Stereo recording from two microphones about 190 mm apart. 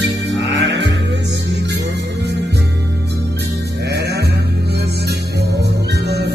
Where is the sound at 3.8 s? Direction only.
60° right (ahead or behind).